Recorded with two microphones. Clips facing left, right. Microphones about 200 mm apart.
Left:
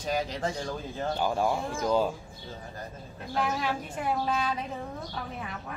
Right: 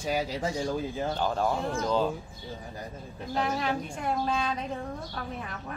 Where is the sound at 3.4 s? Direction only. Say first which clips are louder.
Right 1 dB; 5° left (ahead or behind).